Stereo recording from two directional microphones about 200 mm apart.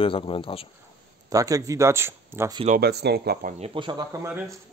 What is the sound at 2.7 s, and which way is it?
Speech, 50° right (ahead or behind).